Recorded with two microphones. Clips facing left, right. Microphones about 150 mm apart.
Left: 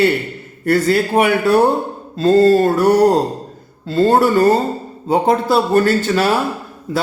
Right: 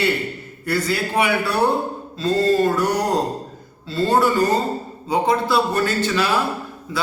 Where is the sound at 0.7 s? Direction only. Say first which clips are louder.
Left 8 dB; 50° left (ahead or behind).